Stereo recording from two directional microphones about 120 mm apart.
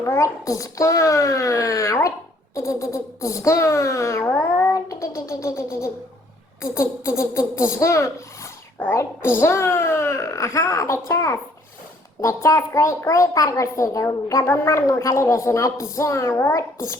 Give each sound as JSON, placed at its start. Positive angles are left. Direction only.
{"t": 0.0, "sound": "a child's voice", "side_deg": 25}
{"t": 6.7, "sound": "a child's voice", "side_deg": 25}